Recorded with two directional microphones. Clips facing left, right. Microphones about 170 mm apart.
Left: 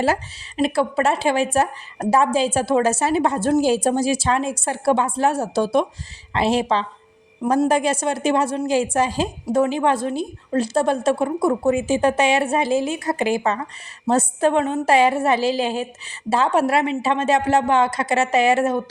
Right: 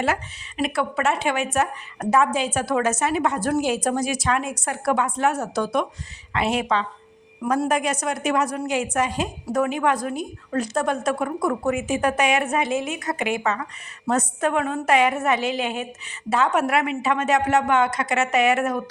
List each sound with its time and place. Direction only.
0.0 s a woman's voice: 30° left (ahead or behind)